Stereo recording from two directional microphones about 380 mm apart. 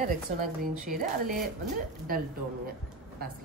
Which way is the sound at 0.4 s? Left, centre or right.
Right.